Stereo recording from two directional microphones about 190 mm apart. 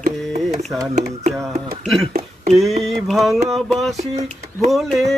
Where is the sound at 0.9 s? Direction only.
35° right (ahead or behind).